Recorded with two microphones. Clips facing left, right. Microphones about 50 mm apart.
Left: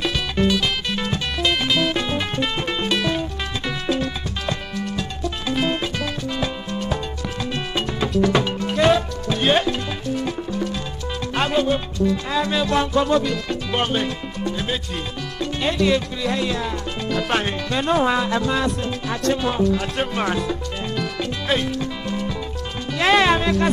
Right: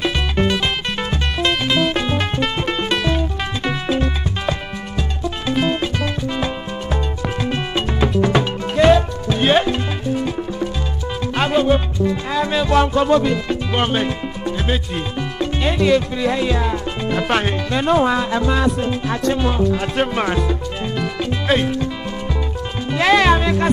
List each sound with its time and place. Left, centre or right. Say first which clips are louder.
0.0 s music: right 2 dB; centre
1.5 s music: right 2 dB; centre
7.5 s music: right 3 dB; centre
12.5 s music: right 5 dB; centre
12.8 s music: right 3 dB; centre
15.6 s speech: right 3 dB; centre
19.8 s speech: right 4 dB; centre
20.3 s music: right 3 dB; centre
23.2 s speech: right 2 dB; centre